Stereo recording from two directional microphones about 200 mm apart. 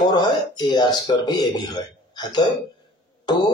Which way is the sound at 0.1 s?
20° left (ahead or behind).